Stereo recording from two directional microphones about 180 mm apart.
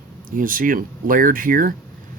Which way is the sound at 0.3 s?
50° right (ahead or behind).